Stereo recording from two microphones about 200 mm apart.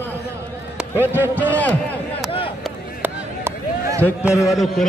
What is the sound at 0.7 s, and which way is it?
Speech, 10° right (ahead or behind).